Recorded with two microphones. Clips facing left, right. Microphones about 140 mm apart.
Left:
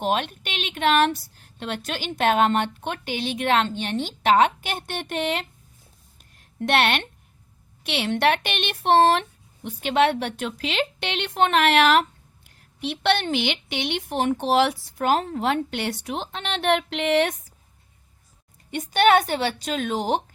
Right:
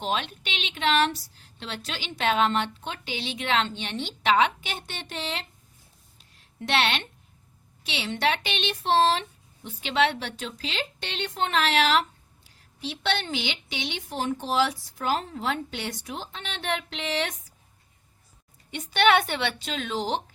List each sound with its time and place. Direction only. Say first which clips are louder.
0.0 s a woman's voice: left 5 dB; 50° left (ahead or behind)
6.1 s a sound: left 8 dB; 55° left (ahead or behind)
7.9 s a woman's voice: left 5 dB; 55° left (ahead or behind)
18.7 s a woman's voice: left 3 dB; 45° left (ahead or behind)